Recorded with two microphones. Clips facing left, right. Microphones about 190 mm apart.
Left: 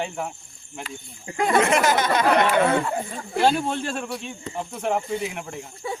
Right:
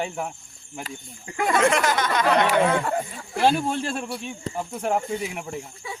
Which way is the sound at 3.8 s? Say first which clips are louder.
Even; 5° right (ahead or behind).